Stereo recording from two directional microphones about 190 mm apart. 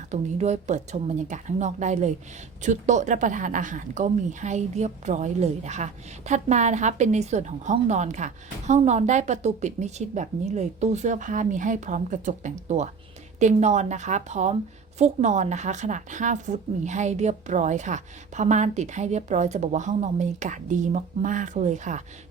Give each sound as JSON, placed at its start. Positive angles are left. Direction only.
{"t": 0.1, "sound": "a woman's voice", "side_deg": -35}